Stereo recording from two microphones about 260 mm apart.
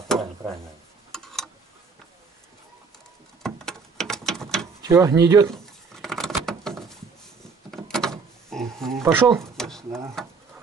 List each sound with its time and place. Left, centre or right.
1.1 s tick-tock: centre
3.4 s a sound: centre
4.8 s speech: centre
5.5 s patter: centre
7.7 s door: centre
9.0 s speech: centre
9.6 s a sound: centre
9.8 s speech: centre